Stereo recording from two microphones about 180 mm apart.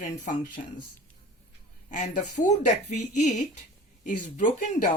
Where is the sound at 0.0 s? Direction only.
45° left (ahead or behind).